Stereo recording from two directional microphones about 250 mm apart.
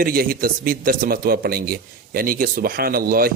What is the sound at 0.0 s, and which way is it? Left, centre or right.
Speech, right.